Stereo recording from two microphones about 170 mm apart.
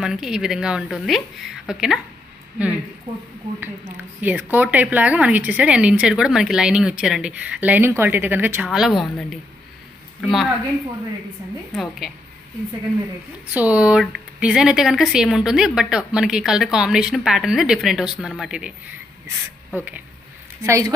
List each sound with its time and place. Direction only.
0.0 s speech: 5° right (ahead or behind)
3.6 s speech: 10° right (ahead or behind)
11.7 s speech: centre (ahead or behind)
13.5 s speech: 10° right (ahead or behind)